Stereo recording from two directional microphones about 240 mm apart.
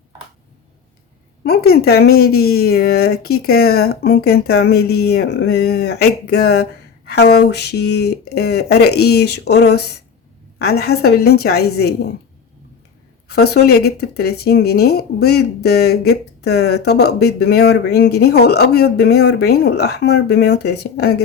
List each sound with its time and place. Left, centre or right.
1.5 s speech: left
13.2 s speech: left